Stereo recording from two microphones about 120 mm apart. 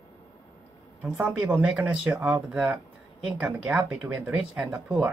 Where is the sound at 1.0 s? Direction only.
15° right (ahead or behind).